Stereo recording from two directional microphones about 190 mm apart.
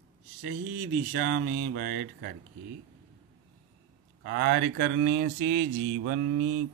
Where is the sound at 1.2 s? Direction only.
50° right (ahead or behind).